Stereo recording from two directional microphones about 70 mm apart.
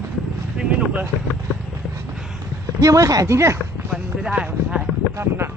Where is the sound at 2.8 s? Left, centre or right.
Right.